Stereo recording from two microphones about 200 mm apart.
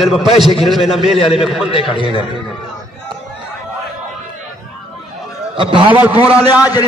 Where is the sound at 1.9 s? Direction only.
25° left (ahead or behind).